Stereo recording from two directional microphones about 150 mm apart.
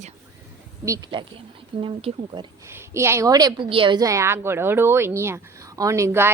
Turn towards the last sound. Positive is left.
turn(degrees=-15)  # may be behind; listen again after turning